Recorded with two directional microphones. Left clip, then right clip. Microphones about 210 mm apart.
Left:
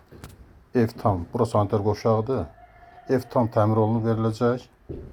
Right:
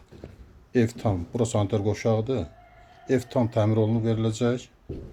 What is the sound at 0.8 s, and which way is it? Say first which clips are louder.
Speech: left 2 dB; 25° right (ahead or behind).